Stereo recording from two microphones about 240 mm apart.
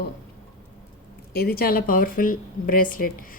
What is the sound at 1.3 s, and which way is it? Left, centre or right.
Speech, left.